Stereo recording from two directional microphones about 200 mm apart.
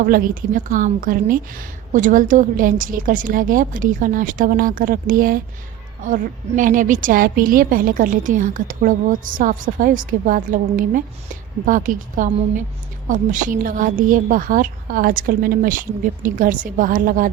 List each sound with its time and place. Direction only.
0.0 s a woman's voice: 40° right (ahead or behind)
6.6 s a woman's voice: 40° right (ahead or behind)